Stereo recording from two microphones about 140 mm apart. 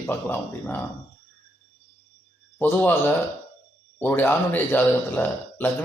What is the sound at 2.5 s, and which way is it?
A man's voice, 15° left (ahead or behind).